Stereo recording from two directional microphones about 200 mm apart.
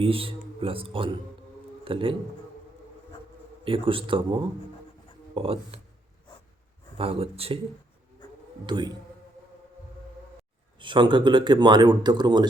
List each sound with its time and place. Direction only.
0.0 s speech: 25° right (ahead or behind)
3.6 s speech: 25° right (ahead or behind)
6.9 s speech: 30° right (ahead or behind)
8.6 s speech: 20° right (ahead or behind)
10.8 s speech: 25° right (ahead or behind)